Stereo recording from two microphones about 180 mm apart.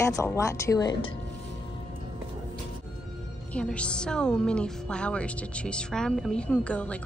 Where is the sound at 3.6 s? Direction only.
5° left (ahead or behind).